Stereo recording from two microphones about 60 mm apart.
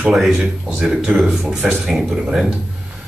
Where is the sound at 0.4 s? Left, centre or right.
Centre.